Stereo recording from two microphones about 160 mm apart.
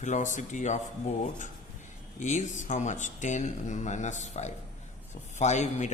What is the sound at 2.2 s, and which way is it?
Speech, 50° left (ahead or behind).